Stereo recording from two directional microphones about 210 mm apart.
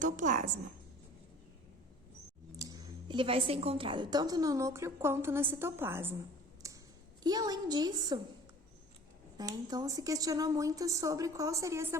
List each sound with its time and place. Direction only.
0.0 s a woman's voice: 35° right (ahead or behind)
2.6 s a woman's voice: 20° right (ahead or behind)
6.6 s a sound: 15° right (ahead or behind)
7.3 s a woman's voice: 20° right (ahead or behind)
9.4 s a woman's voice: 20° right (ahead or behind)